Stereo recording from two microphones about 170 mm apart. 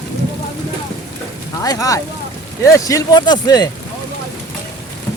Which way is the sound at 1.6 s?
20° left (ahead or behind).